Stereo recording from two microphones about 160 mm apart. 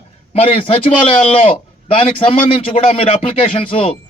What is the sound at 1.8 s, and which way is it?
A man's voice, 35° left (ahead or behind).